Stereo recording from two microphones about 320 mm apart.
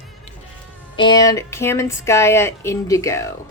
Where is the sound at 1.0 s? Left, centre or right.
Centre.